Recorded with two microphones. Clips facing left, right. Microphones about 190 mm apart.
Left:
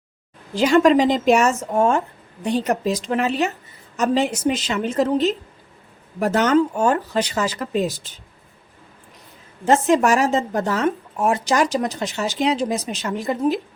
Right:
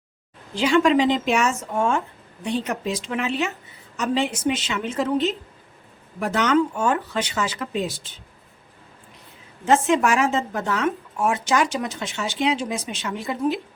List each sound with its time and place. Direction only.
0.5 s speech: 45° left (ahead or behind)
9.6 s speech: 40° left (ahead or behind)